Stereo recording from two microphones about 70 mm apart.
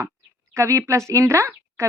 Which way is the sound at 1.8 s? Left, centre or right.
Right.